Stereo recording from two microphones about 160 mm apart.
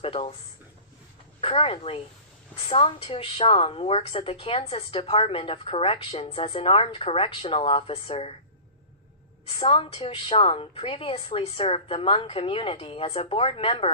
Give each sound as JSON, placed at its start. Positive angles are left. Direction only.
{"t": 0.0, "sound": "speech", "side_deg": 35}
{"t": 1.4, "sound": "a woman's voice", "side_deg": 35}
{"t": 9.5, "sound": "a woman's voice", "side_deg": 40}